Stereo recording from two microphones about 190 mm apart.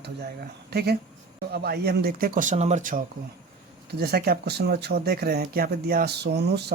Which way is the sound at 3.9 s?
55° right (ahead or behind).